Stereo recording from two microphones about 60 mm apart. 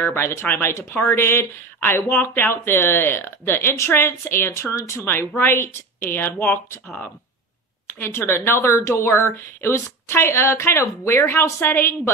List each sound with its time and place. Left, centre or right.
0.1 s a woman's voice: left
8.0 s a woman's voice: left